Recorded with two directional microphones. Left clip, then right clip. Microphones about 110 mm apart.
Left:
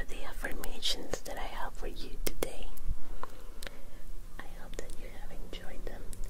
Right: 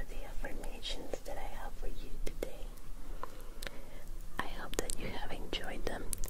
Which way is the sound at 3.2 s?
Centre (ahead or behind).